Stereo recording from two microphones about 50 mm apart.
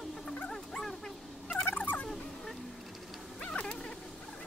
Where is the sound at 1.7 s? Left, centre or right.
Left.